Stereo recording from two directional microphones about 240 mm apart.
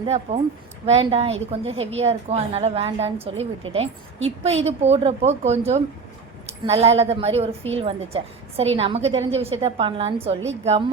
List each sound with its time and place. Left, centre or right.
0.3 s a woman's voice: right